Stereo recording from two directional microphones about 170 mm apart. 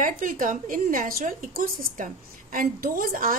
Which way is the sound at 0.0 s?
50° right (ahead or behind).